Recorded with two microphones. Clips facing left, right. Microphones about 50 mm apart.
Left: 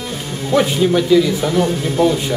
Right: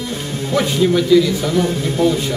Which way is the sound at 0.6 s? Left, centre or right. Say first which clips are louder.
Left 1 dB; centre.